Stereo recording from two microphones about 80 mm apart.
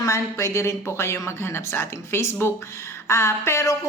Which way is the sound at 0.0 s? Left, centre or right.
Left.